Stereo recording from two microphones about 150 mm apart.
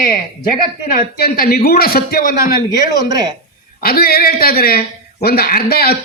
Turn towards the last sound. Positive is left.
turn(degrees=90)